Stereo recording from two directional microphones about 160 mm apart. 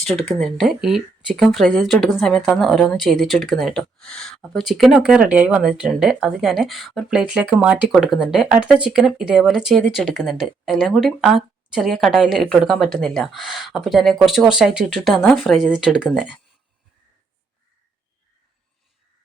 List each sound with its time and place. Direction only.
0.1 s speech: centre (ahead or behind)